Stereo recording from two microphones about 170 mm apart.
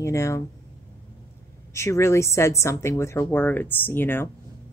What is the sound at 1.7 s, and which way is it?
A woman's voice, 15° left (ahead or behind).